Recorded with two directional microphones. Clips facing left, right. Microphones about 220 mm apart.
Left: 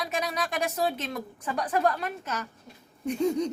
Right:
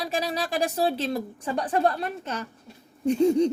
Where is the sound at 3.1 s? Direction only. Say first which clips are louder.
Right 6 dB; 30° right (ahead or behind).